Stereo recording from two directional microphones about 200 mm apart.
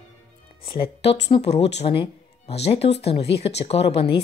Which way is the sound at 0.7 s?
25° left (ahead or behind).